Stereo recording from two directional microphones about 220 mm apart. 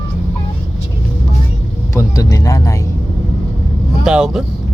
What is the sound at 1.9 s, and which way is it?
Speech, 15° left (ahead or behind).